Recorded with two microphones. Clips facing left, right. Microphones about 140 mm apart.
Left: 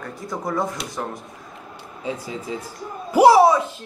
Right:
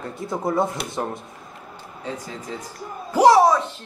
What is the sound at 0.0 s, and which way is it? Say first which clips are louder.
Speech: right 3 dB; 25° right (ahead or behind).